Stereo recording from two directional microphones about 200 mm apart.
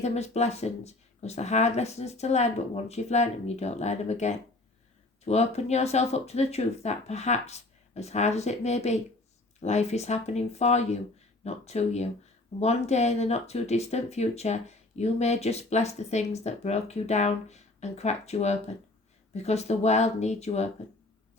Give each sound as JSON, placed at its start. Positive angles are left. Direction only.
{"t": 0.0, "sound": "speech", "side_deg": 35}